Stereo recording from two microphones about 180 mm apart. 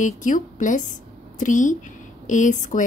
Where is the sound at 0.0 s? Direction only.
45° left (ahead or behind).